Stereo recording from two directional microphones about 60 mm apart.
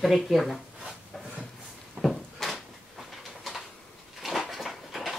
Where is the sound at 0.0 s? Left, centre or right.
Centre.